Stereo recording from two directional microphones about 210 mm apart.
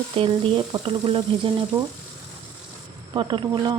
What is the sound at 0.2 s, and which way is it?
Speech, 25° right (ahead or behind).